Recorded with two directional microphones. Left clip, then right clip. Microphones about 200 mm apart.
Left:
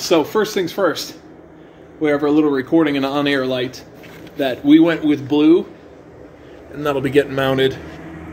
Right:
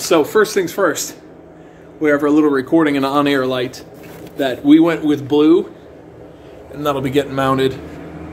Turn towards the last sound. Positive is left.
turn(degrees=25)  # may be behind; listen again after turning